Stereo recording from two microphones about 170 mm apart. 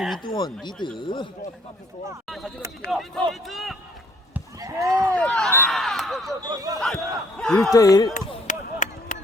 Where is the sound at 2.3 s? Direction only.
Centre (ahead or behind).